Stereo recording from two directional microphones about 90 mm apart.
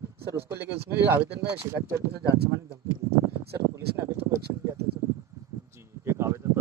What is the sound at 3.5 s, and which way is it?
Speech, 30° right (ahead or behind).